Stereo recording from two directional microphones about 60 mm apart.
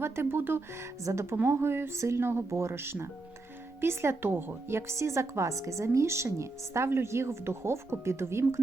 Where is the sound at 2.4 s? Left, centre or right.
Right.